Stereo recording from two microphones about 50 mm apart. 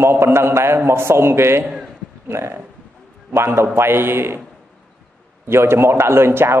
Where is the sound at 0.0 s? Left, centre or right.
Right.